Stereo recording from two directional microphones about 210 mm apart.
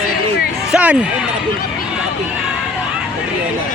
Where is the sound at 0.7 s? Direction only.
5° right (ahead or behind).